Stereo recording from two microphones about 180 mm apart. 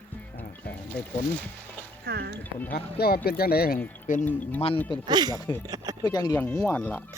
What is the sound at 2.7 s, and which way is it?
Speech, 60° left (ahead or behind).